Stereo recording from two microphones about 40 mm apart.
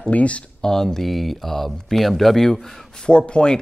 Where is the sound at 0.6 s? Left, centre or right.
Centre.